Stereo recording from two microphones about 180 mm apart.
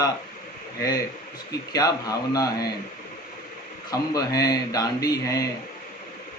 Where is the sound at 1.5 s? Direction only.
20° left (ahead or behind).